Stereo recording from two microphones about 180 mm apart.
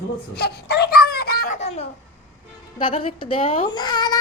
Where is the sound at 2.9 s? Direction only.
30° left (ahead or behind).